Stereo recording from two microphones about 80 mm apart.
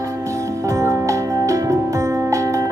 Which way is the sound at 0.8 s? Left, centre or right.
Right.